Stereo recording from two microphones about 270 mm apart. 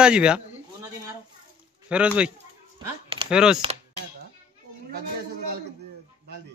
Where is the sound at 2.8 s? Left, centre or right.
Centre.